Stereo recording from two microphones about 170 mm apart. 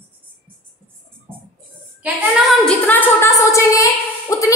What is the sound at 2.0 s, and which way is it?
A woman's voice, centre (ahead or behind).